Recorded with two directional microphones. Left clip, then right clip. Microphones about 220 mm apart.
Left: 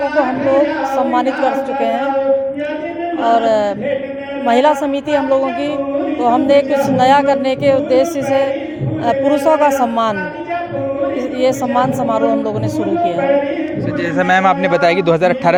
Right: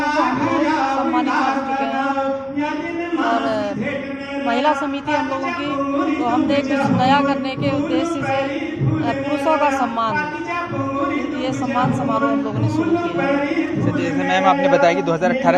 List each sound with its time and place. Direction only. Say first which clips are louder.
3.3 s chant: left 8 dB; 45° left (ahead or behind)
4.4 s speech: left 6 dB; 45° left (ahead or behind)
9.0 s speech: left 8 dB; 50° left (ahead or behind)
11.4 s speech: left 8 dB; 45° left (ahead or behind)
14.2 s speech: left 4 dB; 50° left (ahead or behind)